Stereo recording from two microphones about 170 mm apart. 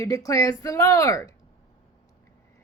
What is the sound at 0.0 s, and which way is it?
Speech, 20° left (ahead or behind).